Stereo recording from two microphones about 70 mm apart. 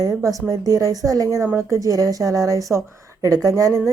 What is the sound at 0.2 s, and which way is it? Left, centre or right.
A woman's voice, right.